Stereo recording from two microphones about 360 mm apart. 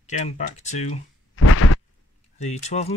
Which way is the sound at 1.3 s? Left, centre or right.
Left.